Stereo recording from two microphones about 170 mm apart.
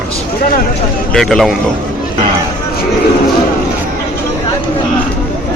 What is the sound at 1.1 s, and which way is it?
Speech, centre (ahead or behind).